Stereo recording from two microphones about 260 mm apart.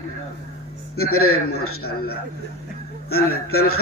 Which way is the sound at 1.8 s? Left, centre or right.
Left.